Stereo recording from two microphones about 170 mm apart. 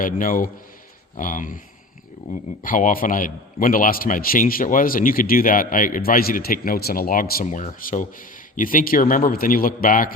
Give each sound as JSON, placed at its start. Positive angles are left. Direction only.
{"t": 0.0, "sound": "a man's voice", "side_deg": 55}